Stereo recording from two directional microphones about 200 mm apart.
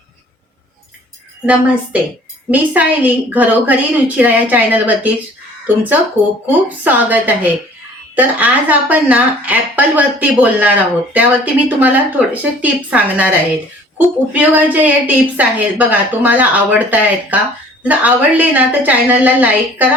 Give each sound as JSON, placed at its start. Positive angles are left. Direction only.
{"t": 1.5, "sound": "a woman's voice", "side_deg": -5}